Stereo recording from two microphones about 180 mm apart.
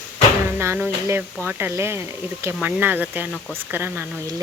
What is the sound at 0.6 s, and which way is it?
Speech, 10° right (ahead or behind).